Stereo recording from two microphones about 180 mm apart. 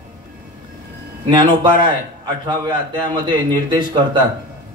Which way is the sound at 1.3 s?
25° right (ahead or behind).